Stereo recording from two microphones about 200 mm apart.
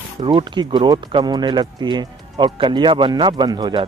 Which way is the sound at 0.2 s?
25° right (ahead or behind).